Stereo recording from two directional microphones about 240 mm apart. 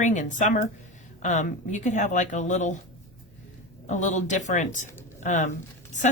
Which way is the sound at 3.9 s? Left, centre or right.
Left.